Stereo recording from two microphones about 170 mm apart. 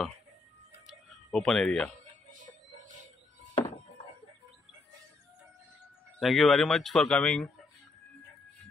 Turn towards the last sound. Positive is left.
turn(degrees=5)  # may be behind; listen again after turning